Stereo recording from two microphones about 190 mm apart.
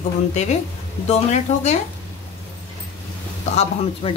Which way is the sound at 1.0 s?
35° left (ahead or behind).